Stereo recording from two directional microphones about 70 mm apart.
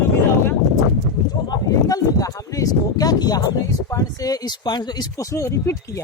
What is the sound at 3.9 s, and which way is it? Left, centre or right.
Speech, left.